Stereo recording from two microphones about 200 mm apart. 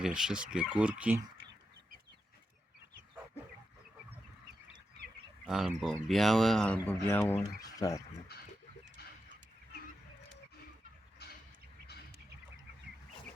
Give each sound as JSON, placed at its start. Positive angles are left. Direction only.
{"t": 0.0, "sound": "speech", "side_deg": -5}
{"t": 5.5, "sound": "speech", "side_deg": 0}
{"t": 8.3, "sound": "livestock", "side_deg": 50}
{"t": 11.2, "sound": "a sound", "side_deg": 50}